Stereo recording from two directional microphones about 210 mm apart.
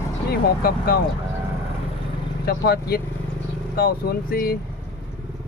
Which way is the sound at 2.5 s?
50° left (ahead or behind).